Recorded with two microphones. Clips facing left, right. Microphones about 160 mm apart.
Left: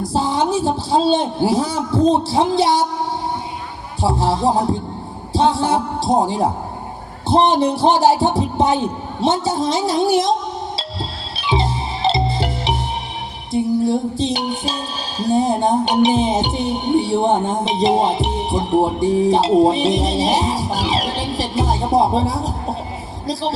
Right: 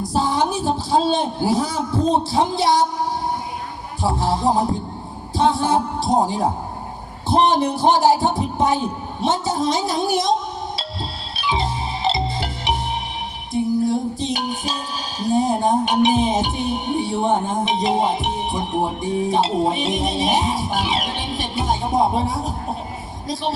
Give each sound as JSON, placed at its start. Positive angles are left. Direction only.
{"t": 0.1, "sound": "music", "side_deg": 30}
{"t": 5.4, "sound": "music", "side_deg": 30}
{"t": 11.3, "sound": "music", "side_deg": 25}
{"t": 23.2, "sound": "speech", "side_deg": 35}